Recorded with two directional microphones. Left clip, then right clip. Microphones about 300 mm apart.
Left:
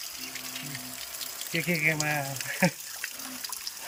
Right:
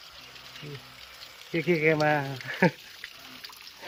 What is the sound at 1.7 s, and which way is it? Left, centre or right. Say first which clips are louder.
Speech: right 5 dB; centre.